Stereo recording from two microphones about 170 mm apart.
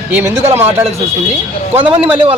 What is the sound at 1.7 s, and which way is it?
Speech, 35° right (ahead or behind).